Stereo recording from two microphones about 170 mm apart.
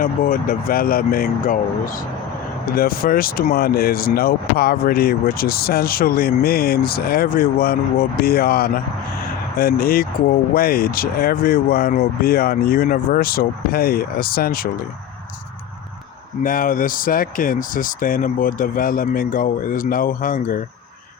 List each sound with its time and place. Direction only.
0.0 s speech: 55° left (ahead or behind)
2.7 s speech: 60° left (ahead or behind)
16.4 s speech: 55° left (ahead or behind)